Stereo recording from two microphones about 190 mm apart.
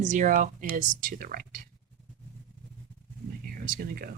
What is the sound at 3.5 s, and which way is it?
Speech, 50° right (ahead or behind).